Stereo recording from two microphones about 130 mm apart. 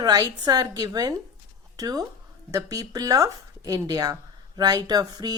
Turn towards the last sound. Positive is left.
turn(degrees=-30)  # may be behind; listen again after turning